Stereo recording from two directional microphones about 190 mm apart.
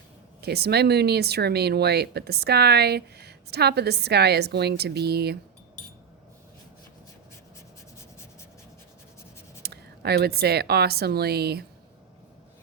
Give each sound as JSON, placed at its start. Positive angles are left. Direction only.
{"t": 0.4, "sound": "speech", "side_deg": -60}
{"t": 9.6, "sound": "a woman's voice", "side_deg": -55}